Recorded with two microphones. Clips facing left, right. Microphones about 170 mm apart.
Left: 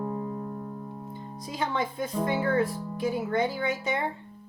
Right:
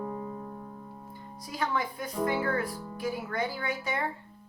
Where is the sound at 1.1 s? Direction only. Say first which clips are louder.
Left 4 dB; 20° left (ahead or behind).